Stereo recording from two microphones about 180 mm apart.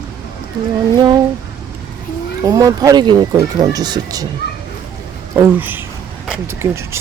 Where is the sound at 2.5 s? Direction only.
20° right (ahead or behind).